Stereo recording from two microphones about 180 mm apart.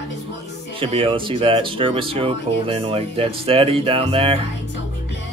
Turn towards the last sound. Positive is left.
turn(degrees=-30)  # may be behind; listen again after turning